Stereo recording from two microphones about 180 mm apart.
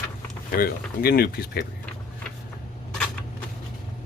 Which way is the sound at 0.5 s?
55° left (ahead or behind).